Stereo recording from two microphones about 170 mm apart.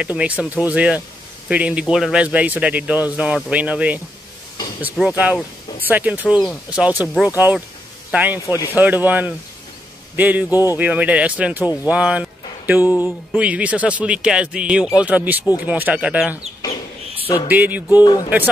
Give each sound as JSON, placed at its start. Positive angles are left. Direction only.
{"t": 0.0, "sound": "speech", "side_deg": -5}
{"t": 8.5, "sound": "speech", "side_deg": 20}
{"t": 8.7, "sound": "speech", "side_deg": -10}
{"t": 10.5, "sound": "speech", "side_deg": 20}
{"t": 10.8, "sound": "speech", "side_deg": -10}
{"t": 17.5, "sound": "speech", "side_deg": -10}
{"t": 18.0, "sound": "speech", "side_deg": 25}